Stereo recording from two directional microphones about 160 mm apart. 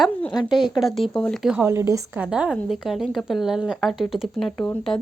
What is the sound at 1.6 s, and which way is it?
A woman's voice, 15° right (ahead or behind).